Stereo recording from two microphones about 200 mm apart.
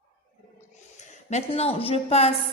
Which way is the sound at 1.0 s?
35° left (ahead or behind).